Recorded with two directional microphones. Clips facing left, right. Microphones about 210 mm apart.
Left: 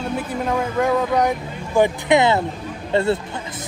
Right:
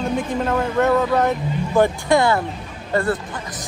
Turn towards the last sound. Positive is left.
turn(degrees=25)  # may be behind; listen again after turning